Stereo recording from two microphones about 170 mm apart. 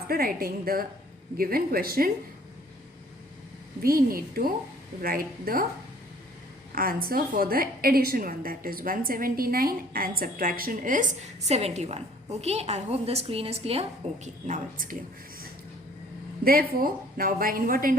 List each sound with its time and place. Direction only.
0.1 s a woman's voice: 60° right (ahead or behind)
3.8 s a woman's voice: 60° right (ahead or behind)
6.7 s a woman's voice: 60° right (ahead or behind)
11.4 s a woman's voice: 40° right (ahead or behind)
14.4 s speech: 50° right (ahead or behind)
16.4 s a woman's voice: 60° right (ahead or behind)